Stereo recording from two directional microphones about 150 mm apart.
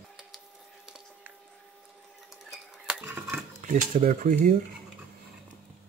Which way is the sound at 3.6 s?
55° right (ahead or behind).